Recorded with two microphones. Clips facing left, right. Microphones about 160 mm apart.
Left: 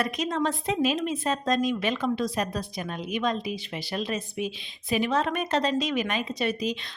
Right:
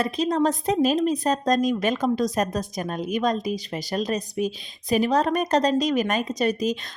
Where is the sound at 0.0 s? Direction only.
35° right (ahead or behind).